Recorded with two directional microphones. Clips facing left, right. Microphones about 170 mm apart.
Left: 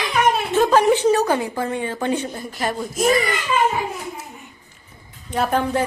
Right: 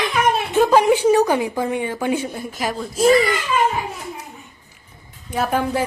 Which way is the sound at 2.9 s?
30° right (ahead or behind).